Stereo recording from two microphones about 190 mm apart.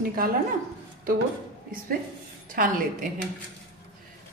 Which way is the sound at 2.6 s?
50° right (ahead or behind).